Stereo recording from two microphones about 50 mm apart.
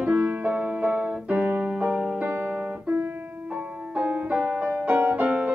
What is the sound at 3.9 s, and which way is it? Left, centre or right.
Music, right.